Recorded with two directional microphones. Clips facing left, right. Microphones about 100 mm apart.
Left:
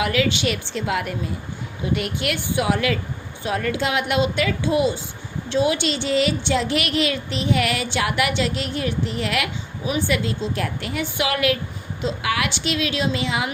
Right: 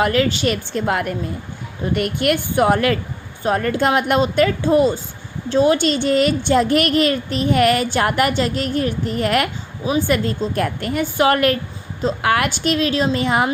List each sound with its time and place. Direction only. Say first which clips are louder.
0.0 s a woman's voice: right 4 dB; 40° right (ahead or behind)